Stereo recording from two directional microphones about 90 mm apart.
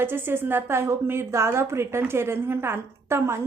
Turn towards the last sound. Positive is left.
turn(degrees=-30)  # may be behind; listen again after turning